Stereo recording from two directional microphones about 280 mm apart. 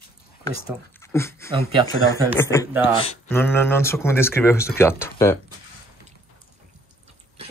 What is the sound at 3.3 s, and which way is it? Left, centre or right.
Speech, centre.